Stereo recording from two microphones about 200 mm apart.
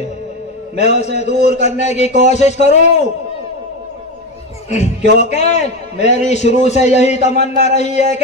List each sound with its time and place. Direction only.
0.7 s a man's voice: 35° left (ahead or behind)
5.1 s a man's voice: 35° left (ahead or behind)